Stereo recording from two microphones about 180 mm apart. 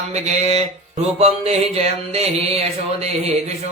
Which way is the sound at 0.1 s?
40° right (ahead or behind).